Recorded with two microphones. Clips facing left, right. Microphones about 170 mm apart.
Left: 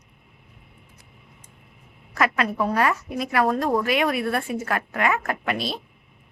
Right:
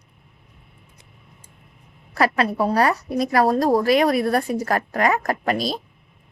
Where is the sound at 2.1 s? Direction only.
35° right (ahead or behind).